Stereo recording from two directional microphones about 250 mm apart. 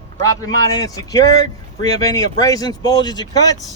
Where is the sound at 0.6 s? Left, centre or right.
Centre.